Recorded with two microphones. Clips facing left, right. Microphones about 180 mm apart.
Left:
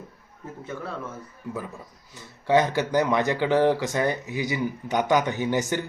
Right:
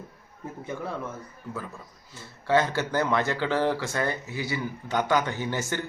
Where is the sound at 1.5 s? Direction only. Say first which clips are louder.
Left 4 dB; 15° left (ahead or behind).